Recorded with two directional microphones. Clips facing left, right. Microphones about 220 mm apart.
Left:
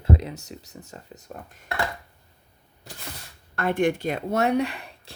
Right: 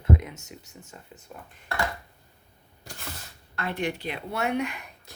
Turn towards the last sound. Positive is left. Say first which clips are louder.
# left 2 dB
turn(degrees=30)  # may be behind; listen again after turning